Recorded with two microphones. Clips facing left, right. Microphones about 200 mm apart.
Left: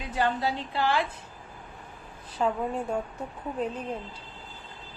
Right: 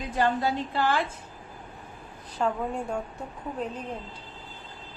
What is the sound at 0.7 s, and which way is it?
Speech, 45° right (ahead or behind).